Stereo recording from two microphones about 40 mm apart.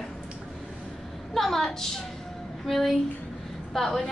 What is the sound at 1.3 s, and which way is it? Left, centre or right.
A woman's voice, centre.